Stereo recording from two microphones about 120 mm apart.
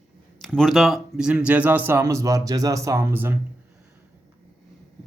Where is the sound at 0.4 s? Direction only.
5° left (ahead or behind); by 3.3 s 20° right (ahead or behind).